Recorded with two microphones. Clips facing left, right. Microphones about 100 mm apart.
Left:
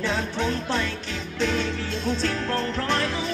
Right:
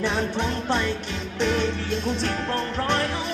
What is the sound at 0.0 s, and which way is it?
Music, 20° right (ahead or behind).